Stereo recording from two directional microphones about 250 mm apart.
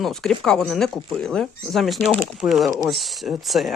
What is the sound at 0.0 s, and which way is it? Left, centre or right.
Speech, centre.